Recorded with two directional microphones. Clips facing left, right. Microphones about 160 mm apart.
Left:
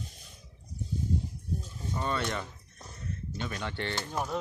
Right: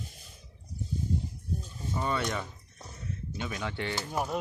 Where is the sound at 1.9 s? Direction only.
5° right (ahead or behind).